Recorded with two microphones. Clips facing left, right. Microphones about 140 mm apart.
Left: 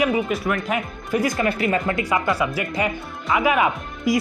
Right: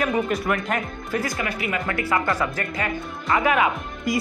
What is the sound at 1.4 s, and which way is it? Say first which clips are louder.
Speech: left 6 dB; 35° left (ahead or behind).